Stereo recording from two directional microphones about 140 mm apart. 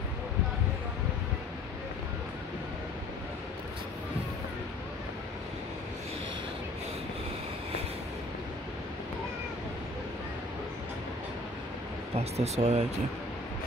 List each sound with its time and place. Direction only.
12.2 s speech: 50° right (ahead or behind)